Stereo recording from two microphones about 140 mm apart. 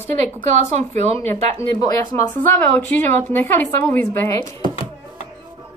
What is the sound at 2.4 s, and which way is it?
A woman's voice, 15° left (ahead or behind).